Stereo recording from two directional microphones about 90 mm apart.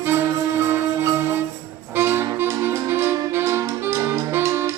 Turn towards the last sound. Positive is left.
turn(degrees=-25)  # may be behind; listen again after turning